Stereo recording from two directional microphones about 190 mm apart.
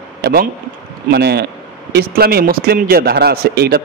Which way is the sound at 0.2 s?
55° right (ahead or behind).